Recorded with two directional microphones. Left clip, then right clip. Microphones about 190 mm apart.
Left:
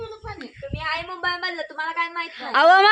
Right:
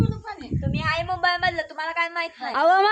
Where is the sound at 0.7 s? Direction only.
25° right (ahead or behind).